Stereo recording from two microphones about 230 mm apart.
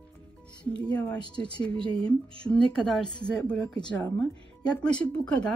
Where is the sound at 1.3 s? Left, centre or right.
Centre.